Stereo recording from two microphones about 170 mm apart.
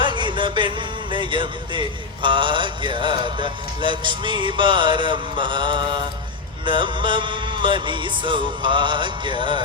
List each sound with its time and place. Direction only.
0.0 s speech: 30° right (ahead or behind)